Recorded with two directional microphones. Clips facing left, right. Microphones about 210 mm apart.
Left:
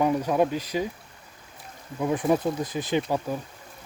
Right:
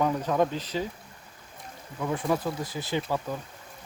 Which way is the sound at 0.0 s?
10° left (ahead or behind).